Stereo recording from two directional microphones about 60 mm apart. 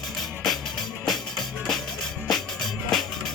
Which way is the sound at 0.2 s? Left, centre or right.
Centre.